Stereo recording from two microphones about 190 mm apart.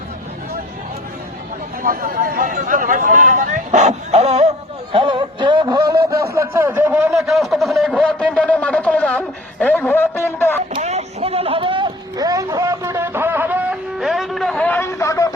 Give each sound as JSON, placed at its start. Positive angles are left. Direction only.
{"t": 1.8, "sound": "a man's voice", "side_deg": -50}
{"t": 10.8, "sound": "vehicle", "side_deg": -35}